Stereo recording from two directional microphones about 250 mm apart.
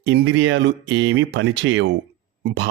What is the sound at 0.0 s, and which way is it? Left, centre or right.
Speech, right.